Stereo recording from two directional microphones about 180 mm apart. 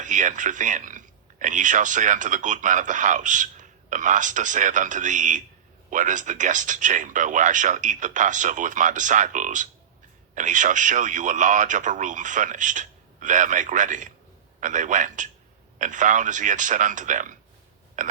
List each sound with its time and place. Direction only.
0.0 s speech: 45° right (ahead or behind)